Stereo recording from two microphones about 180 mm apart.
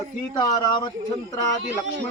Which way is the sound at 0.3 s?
20° left (ahead or behind).